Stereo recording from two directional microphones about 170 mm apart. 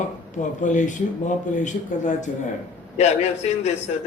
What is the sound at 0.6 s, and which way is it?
A man's voice, 45° left (ahead or behind).